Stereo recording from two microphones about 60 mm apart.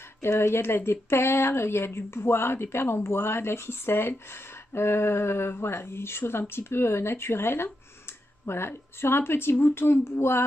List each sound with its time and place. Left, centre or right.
0.2 s speech: left